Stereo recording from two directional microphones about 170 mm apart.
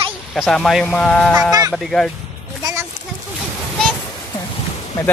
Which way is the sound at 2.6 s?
20° right (ahead or behind).